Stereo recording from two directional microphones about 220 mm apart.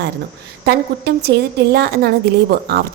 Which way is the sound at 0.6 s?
45° right (ahead or behind).